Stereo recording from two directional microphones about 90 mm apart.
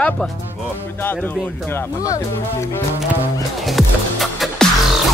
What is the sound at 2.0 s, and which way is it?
Speech, 35° left (ahead or behind).